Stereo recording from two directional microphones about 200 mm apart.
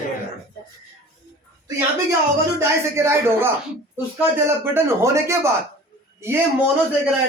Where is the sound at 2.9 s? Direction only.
10° right (ahead or behind).